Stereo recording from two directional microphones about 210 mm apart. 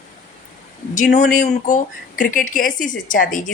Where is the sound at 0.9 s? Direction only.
35° left (ahead or behind).